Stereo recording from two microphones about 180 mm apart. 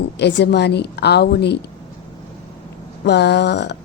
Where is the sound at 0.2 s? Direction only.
75° left (ahead or behind).